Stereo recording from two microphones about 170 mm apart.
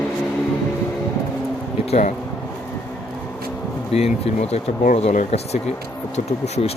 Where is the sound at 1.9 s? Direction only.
45° left (ahead or behind).